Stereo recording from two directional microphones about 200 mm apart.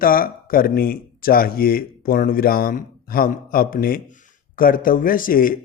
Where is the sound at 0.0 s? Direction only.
45° left (ahead or behind).